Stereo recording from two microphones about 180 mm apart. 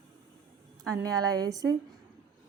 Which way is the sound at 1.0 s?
20° right (ahead or behind).